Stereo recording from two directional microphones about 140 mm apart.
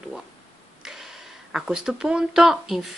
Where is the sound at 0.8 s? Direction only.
5° right (ahead or behind).